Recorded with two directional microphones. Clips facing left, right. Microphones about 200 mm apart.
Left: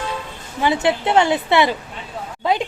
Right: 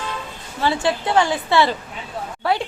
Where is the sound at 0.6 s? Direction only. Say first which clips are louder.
Left 2 dB; 20° left (ahead or behind).